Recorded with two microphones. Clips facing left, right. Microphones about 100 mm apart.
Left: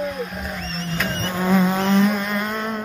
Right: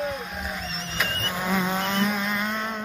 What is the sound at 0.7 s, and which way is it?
Vehicle, centre (ahead or behind).